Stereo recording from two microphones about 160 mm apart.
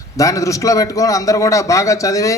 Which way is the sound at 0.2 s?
20° left (ahead or behind).